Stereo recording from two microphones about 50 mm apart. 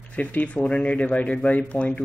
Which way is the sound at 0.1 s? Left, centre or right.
Left.